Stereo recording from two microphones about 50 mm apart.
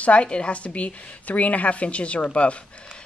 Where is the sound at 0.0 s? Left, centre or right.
Left.